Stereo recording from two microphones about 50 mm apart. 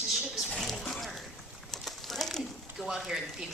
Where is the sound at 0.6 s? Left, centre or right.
Centre.